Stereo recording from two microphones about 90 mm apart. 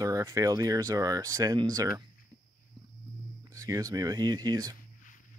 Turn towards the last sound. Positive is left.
turn(degrees=-50)  # may be behind; listen again after turning